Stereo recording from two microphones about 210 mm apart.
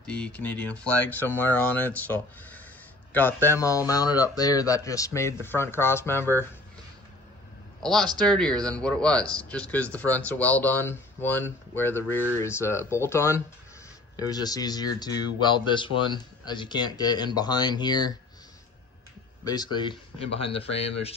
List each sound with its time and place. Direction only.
0.0 s speech: 5° left (ahead or behind)
7.8 s speech: centre (ahead or behind); by 18.1 s 20° left (ahead or behind)
19.4 s speech: 20° left (ahead or behind)